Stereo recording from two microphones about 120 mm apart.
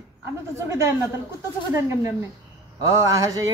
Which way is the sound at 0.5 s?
25° right (ahead or behind).